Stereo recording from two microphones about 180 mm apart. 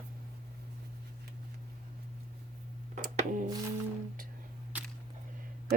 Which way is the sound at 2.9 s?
45° right (ahead or behind).